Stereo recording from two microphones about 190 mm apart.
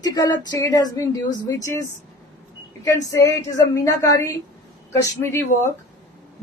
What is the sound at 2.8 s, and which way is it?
A woman's voice, 15° left (ahead or behind).